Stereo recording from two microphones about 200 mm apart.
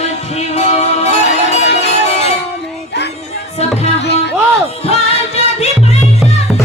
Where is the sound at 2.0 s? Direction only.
35° left (ahead or behind).